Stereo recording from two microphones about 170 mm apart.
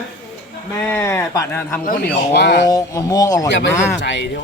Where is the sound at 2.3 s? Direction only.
75° left (ahead or behind).